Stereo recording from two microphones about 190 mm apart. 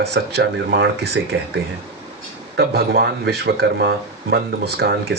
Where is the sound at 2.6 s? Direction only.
55° right (ahead or behind).